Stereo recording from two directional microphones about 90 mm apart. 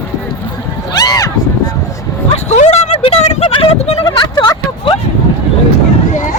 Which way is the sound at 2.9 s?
90° left.